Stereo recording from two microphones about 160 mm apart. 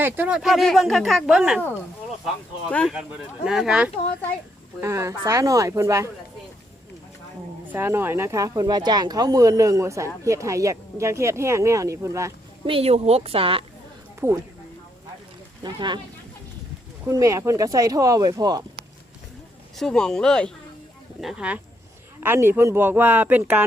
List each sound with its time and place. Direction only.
0.0 s speech: 10° right (ahead or behind)
2.9 s speech: 5° right (ahead or behind)
4.8 s speech: 15° right (ahead or behind)
7.7 s speech: 15° right (ahead or behind)
12.6 s speech: 35° right (ahead or behind)
14.2 s speech: 15° right (ahead or behind)
15.6 s speech: 30° right (ahead or behind)
17.1 s speech: 20° right (ahead or behind)
19.7 s speech: 5° left (ahead or behind)